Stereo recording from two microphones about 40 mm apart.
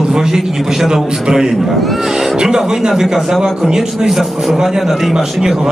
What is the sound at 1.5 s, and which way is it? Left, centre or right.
A man's voice, centre.